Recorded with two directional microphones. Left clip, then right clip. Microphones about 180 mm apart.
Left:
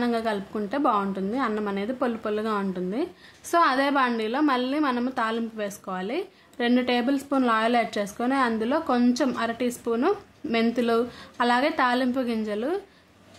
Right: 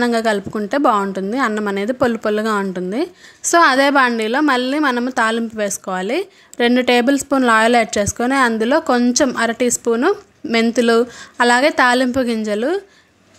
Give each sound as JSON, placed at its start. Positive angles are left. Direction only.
{"t": 0.0, "sound": "a woman's voice", "side_deg": -35}